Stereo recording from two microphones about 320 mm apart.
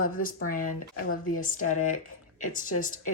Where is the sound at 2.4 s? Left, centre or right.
Left.